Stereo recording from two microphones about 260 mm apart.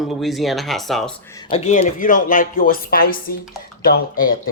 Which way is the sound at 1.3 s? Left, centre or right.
Centre.